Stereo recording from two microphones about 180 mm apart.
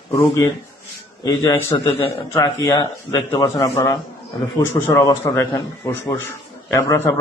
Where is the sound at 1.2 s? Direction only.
15° left (ahead or behind).